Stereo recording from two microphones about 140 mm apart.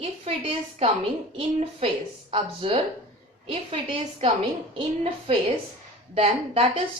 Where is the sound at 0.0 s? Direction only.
45° right (ahead or behind).